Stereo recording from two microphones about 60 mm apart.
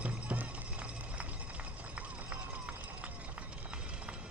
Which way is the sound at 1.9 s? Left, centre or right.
Right.